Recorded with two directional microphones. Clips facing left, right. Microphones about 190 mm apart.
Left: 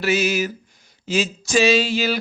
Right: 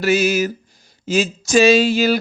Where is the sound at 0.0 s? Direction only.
45° right (ahead or behind).